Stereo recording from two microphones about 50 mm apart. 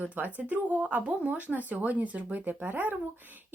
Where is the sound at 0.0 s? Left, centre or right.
Right.